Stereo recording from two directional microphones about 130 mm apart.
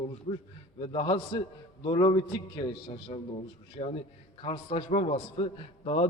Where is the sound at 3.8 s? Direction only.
55° left (ahead or behind).